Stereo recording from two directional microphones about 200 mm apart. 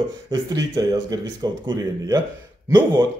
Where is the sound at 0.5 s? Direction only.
20° right (ahead or behind).